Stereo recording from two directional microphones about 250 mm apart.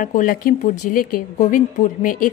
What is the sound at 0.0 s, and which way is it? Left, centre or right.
Speech, left.